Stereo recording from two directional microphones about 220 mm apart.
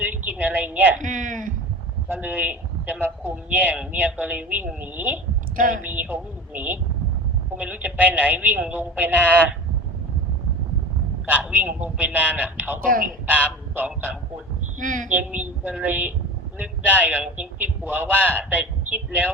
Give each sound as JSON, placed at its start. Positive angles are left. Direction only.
{"t": 0.0, "sound": "a sound", "side_deg": -5}
{"t": 0.9, "sound": "a sound", "side_deg": -35}
{"t": 2.0, "sound": "a man's voice", "side_deg": -5}
{"t": 5.5, "sound": "speech", "side_deg": -40}
{"t": 5.8, "sound": "a man's voice", "side_deg": -10}
{"t": 11.3, "sound": "a man's voice", "side_deg": -10}
{"t": 12.8, "sound": "speech", "side_deg": -40}
{"t": 13.2, "sound": "speech", "side_deg": -5}
{"t": 14.8, "sound": "speech", "side_deg": -35}
{"t": 15.1, "sound": "a man's voice", "side_deg": -5}